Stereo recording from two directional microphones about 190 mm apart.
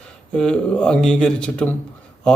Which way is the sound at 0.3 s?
5° left (ahead or behind).